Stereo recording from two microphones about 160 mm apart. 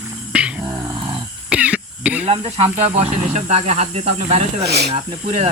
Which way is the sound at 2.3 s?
40° right (ahead or behind).